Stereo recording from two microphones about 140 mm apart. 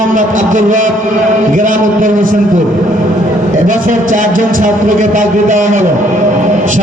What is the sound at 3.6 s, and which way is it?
A man's voice, 70° right (ahead or behind).